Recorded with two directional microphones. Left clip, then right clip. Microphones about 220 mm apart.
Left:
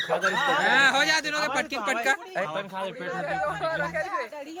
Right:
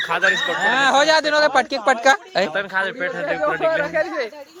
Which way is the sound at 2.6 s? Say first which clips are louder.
Right 10 dB; 35° right (ahead or behind).